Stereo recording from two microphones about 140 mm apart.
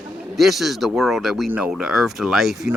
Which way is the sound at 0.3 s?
Centre (ahead or behind).